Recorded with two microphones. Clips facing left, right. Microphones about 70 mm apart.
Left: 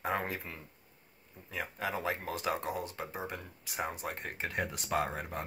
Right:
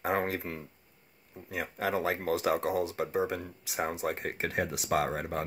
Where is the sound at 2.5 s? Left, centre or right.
Right.